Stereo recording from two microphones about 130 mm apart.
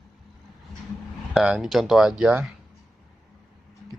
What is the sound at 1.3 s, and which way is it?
Speech, 5° right (ahead or behind).